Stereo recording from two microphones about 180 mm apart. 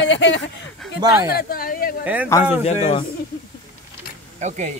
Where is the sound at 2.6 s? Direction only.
40° left (ahead or behind).